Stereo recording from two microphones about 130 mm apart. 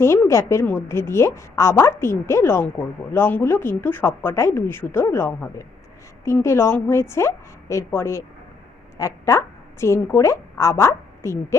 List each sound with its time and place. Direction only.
0.0 s a woman's voice: 20° left (ahead or behind)